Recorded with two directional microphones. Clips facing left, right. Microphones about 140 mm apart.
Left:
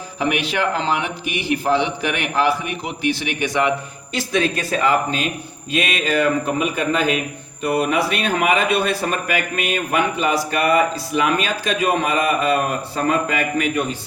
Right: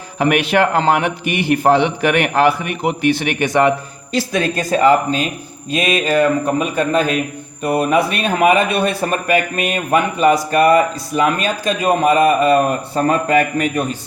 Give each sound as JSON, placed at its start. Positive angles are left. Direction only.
{"t": 0.2, "sound": "a man's voice", "side_deg": -55}